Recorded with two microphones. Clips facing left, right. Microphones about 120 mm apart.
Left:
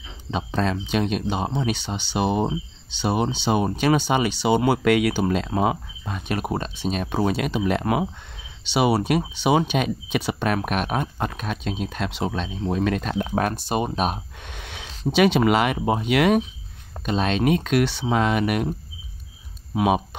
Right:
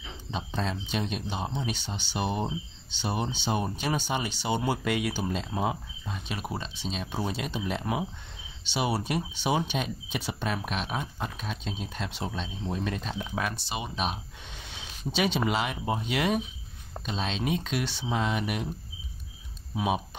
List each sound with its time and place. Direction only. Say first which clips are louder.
0.3 s speech: left 8 dB; 75° left (ahead or behind)
19.7 s speech: left 8 dB; 75° left (ahead or behind)